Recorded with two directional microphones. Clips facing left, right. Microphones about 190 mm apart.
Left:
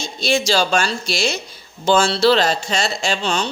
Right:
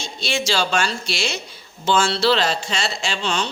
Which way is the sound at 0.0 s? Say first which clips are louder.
Left 5 dB; 40° left (ahead or behind).